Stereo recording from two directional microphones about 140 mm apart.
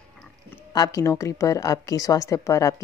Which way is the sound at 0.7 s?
25° left (ahead or behind).